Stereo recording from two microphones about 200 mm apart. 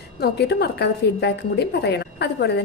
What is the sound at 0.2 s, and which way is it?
A woman's voice, 55° left (ahead or behind).